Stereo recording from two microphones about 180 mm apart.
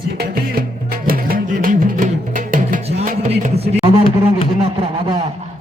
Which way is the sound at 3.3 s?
35° right (ahead or behind).